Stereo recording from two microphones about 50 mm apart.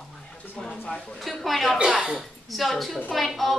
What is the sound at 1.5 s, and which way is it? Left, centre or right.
A woman's voice, centre.